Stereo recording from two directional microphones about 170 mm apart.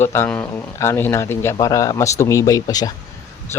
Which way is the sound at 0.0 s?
15° left (ahead or behind).